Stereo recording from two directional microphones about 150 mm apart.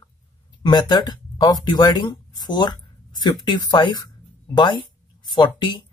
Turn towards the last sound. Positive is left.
turn(degrees=30)  # may be behind; listen again after turning